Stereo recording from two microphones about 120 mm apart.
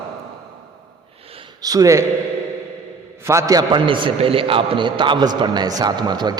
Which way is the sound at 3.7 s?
45° right (ahead or behind).